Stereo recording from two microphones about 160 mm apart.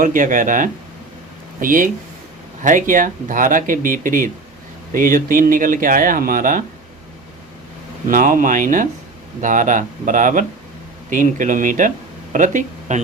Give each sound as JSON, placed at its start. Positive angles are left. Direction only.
{"t": 0.0, "sound": "speech", "side_deg": -55}
{"t": 8.0, "sound": "speech", "side_deg": -55}